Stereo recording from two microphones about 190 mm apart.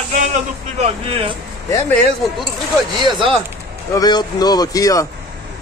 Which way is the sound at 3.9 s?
20° left (ahead or behind).